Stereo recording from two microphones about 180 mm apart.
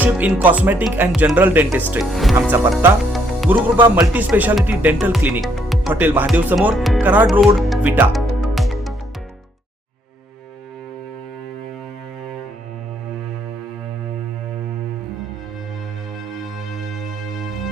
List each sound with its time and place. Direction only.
0.0 s speech: 10° right (ahead or behind)
2.5 s speech: 15° right (ahead or behind)
3.0 s music: centre (ahead or behind)
3.8 s speech: 10° right (ahead or behind)
5.9 s speech: 10° right (ahead or behind)
7.4 s music: 5° right (ahead or behind)